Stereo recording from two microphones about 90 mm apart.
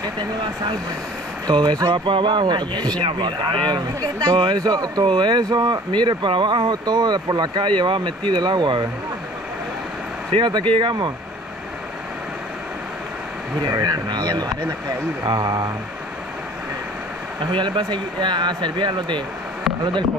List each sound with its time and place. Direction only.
1.5 s speech: 50° right (ahead or behind)
1.9 s speech: 70° right (ahead or behind); by 2.9 s 55° right (ahead or behind)
3.0 s speech: 70° right (ahead or behind)
3.6 s speech: 50° right (ahead or behind)
5.0 s speech: 60° right (ahead or behind)
10.3 s speech: 65° right (ahead or behind)
13.7 s speech: 45° right (ahead or behind)
15.2 s speech: 50° right (ahead or behind)
17.5 s speech: 65° right (ahead or behind)